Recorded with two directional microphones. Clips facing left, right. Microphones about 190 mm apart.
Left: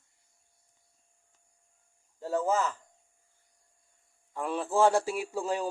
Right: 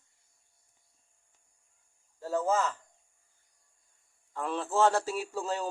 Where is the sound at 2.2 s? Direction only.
15° left (ahead or behind).